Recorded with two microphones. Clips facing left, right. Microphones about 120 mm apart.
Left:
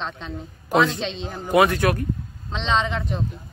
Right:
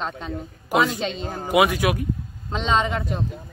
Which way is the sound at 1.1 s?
45° right (ahead or behind).